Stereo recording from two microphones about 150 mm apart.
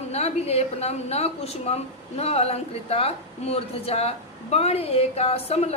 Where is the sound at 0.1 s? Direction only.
45° left (ahead or behind).